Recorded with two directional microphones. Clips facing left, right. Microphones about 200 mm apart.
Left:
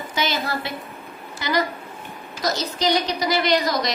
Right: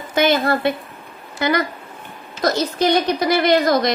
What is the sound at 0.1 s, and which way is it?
A woman's voice, 55° right (ahead or behind).